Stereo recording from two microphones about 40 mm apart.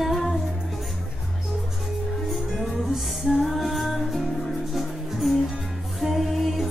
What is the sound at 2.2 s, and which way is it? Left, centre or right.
Music, centre.